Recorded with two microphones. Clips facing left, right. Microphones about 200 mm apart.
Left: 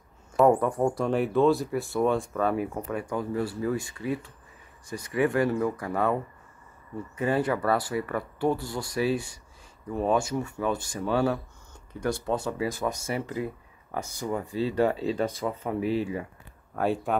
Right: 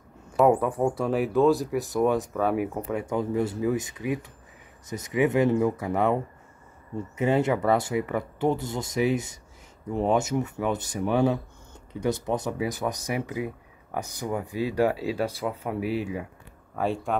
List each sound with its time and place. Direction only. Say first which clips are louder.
0.4 s speech: even; 5° right (ahead or behind)
1.9 s speech: right 1 dB; 15° right (ahead or behind)
16.7 s speech: left 1 dB; centre (ahead or behind)